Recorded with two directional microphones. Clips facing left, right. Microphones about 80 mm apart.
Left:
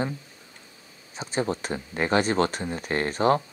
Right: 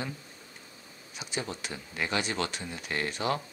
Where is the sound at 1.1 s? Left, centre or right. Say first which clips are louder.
Left 9 dB; left.